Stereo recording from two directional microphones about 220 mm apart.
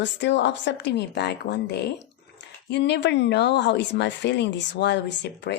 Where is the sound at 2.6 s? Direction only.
50° left (ahead or behind).